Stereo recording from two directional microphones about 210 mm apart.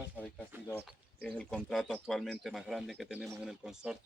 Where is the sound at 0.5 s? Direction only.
10° right (ahead or behind).